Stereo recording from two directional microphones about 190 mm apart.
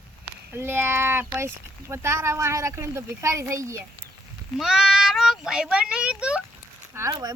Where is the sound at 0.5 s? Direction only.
10° right (ahead or behind).